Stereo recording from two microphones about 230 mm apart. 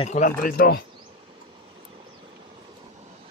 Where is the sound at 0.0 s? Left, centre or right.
Left.